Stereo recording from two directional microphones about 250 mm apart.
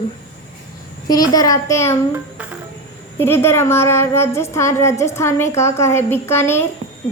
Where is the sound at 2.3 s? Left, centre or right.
Centre.